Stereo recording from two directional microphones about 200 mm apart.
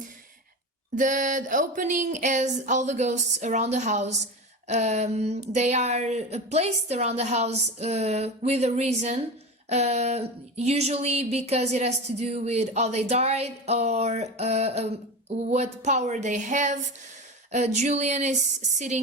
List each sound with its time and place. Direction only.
0.9 s speech: 40° right (ahead or behind)